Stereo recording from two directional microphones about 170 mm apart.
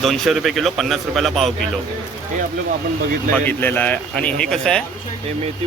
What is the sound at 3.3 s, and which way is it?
Speech, 10° left (ahead or behind).